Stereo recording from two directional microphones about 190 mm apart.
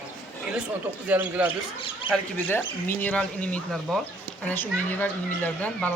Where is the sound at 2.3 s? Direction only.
10° left (ahead or behind).